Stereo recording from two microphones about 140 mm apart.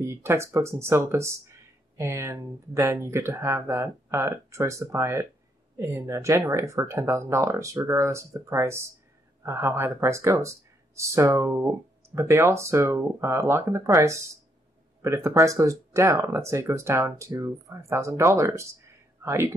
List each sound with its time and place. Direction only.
0.0 s speech: 20° right (ahead or behind)